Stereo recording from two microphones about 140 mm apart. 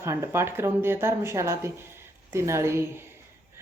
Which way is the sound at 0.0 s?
20° right (ahead or behind).